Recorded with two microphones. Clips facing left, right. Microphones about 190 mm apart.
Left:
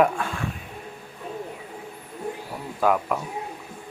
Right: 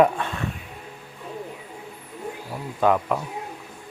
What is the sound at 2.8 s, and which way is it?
Speech, 5° left (ahead or behind).